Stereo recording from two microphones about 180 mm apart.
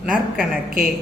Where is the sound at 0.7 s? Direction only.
50° right (ahead or behind).